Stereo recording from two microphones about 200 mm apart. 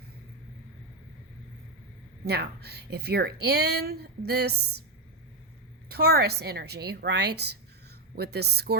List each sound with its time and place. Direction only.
2.2 s speech: 55° right (ahead or behind)
5.9 s speech: 55° right (ahead or behind)